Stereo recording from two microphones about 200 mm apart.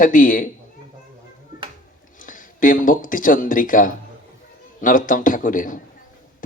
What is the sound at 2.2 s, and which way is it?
Speech, 40° left (ahead or behind).